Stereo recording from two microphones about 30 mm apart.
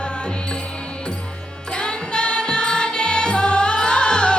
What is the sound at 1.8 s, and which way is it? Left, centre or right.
Music, left.